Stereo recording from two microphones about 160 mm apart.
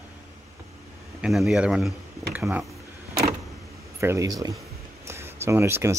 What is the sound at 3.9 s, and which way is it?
Speech, 15° right (ahead or behind).